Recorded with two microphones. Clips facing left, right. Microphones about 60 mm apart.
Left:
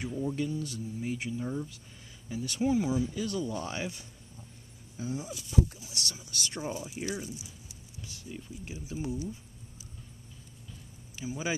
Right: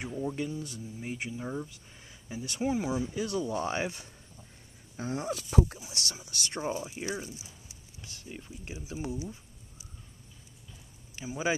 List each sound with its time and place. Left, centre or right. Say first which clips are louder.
0.0 s speech: left 1 dB; centre; by 4.1 s right
4.9 s speech: right 3 dB; right
6.1 s speech: right 1 dB; right
11.1 s speech: right 3 dB; right